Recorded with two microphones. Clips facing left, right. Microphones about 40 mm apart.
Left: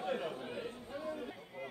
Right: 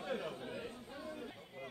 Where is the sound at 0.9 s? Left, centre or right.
Left.